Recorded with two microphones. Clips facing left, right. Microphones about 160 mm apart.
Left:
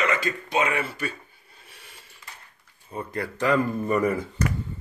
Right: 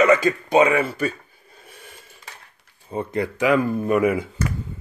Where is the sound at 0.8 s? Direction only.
40° right (ahead or behind).